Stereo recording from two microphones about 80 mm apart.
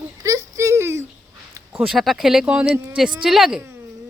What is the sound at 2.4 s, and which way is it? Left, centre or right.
Speech, centre.